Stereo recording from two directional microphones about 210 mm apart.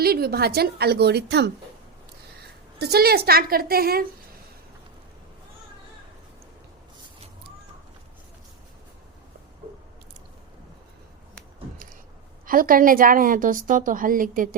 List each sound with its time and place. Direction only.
0.0 s a woman's voice: 50° right (ahead or behind)
12.5 s a woman's voice: 40° right (ahead or behind)